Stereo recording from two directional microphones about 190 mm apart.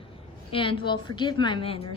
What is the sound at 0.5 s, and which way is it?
A woman's voice, 25° left (ahead or behind).